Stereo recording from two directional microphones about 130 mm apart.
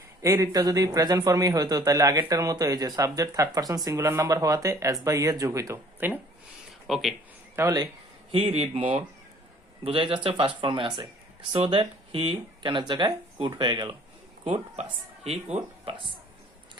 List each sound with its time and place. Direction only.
0.2 s speech: 25° right (ahead or behind)
6.8 s speech: centre (ahead or behind)
7.5 s speech: 25° right (ahead or behind)
8.3 s speech: 50° right (ahead or behind)
14.4 s speech: 55° right (ahead or behind)
15.5 s speech: 40° right (ahead or behind)